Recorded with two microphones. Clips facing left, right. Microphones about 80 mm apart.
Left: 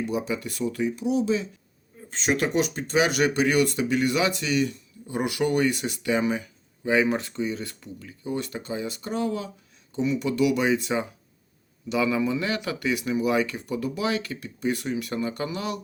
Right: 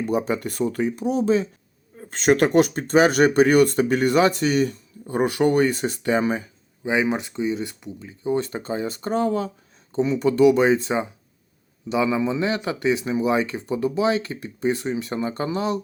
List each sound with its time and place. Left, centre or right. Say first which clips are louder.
0.0 s speech: right 5 dB; right
6.8 s speech: even; centre